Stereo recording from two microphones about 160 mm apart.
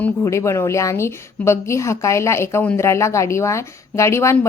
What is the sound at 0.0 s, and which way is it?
A woman's voice, 20° left (ahead or behind).